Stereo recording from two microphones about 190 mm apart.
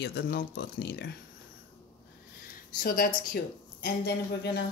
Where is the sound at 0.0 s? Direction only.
60° left (ahead or behind).